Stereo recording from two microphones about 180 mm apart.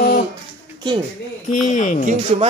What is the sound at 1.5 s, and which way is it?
Speech, 45° left (ahead or behind).